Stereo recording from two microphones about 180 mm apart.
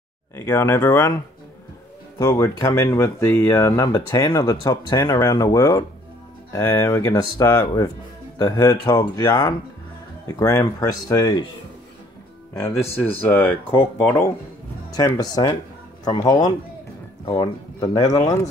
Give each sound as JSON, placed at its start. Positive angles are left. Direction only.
{"t": 0.4, "sound": "speech", "side_deg": 15}
{"t": 2.1, "sound": "speech", "side_deg": 15}
{"t": 12.5, "sound": "speech", "side_deg": 15}